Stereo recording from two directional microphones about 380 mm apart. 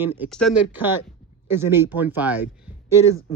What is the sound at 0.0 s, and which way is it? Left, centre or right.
Speech, centre.